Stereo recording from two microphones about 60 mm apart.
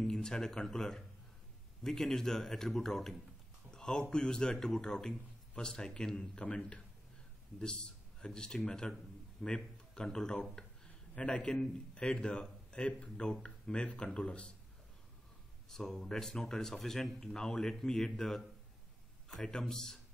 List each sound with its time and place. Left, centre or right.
0.0 s speech: centre
3.7 s a sound: centre
4.1 s a man's voice: centre
10.6 s a sound: centre
11.1 s a man's voice: centre
15.7 s a man's voice: centre